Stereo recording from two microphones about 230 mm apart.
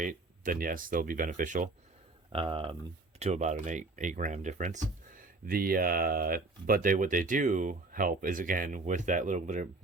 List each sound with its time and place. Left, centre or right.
0.0 s speech: right
2.3 s speech: right